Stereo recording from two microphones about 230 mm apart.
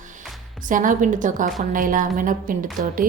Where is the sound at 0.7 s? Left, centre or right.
Right.